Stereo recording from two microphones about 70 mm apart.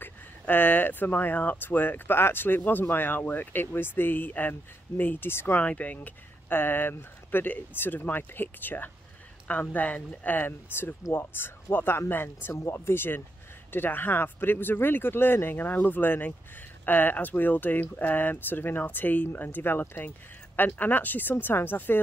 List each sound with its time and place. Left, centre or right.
0.0 s speech: left
5.6 s speech: left